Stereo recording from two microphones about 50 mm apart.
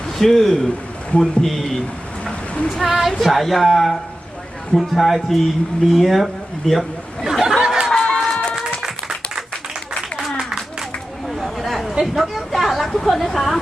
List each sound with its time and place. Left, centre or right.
0.2 s speech: centre
2.8 s speech: centre
7.6 s a sound: centre
7.9 s run: centre
8.8 s music: centre
10.3 s a sound: centre
11.3 s chatter: centre
12.0 s speech: centre